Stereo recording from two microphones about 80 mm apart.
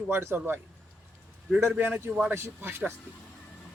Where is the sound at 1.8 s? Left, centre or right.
Right.